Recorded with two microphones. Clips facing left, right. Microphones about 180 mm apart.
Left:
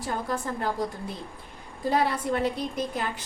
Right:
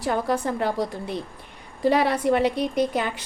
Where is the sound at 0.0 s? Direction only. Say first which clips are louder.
Right 6 dB; 75° right (ahead or behind).